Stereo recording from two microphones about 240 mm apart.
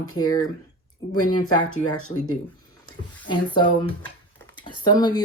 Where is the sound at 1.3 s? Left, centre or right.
Centre.